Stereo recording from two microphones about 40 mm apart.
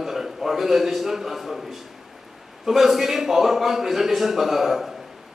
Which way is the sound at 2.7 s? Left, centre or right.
Centre.